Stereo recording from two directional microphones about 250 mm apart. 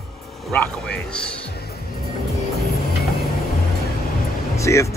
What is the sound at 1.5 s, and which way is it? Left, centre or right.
Music, left.